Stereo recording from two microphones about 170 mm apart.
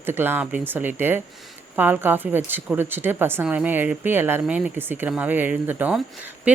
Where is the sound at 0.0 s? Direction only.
15° right (ahead or behind).